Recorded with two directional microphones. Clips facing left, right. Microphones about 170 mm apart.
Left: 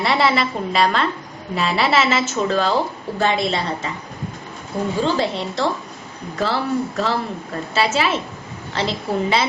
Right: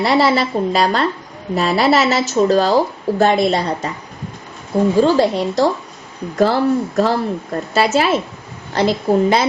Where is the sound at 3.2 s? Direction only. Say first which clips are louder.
Right 5 dB; 50° right (ahead or behind).